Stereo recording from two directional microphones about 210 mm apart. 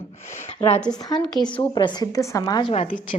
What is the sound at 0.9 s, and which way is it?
Speech, 20° left (ahead or behind).